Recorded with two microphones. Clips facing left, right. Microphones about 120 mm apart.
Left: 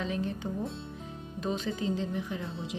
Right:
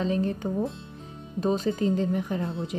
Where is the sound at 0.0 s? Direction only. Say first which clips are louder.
Right 6 dB; 40° right (ahead or behind).